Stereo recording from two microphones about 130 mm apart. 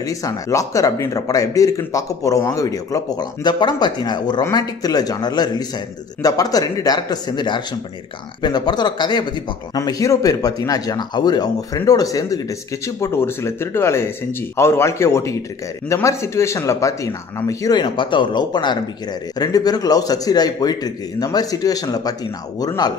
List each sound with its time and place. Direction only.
0.0 s speech: 25° left (ahead or behind)